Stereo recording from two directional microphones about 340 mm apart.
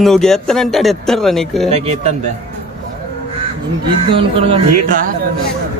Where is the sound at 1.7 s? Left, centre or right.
Centre.